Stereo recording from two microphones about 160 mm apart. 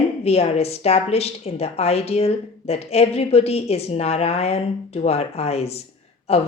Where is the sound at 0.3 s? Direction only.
40° left (ahead or behind).